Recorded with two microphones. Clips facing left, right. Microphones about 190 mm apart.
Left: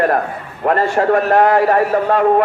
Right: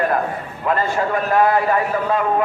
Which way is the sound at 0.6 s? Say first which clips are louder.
Left 6 dB; 70° left (ahead or behind).